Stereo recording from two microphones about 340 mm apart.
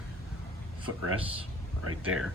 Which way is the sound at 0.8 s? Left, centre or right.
Right.